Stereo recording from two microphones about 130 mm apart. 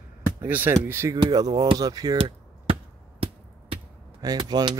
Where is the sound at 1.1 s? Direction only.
30° right (ahead or behind).